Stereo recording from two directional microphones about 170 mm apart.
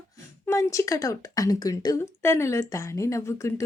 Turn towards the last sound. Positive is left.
turn(degrees=20)  # may be behind; listen again after turning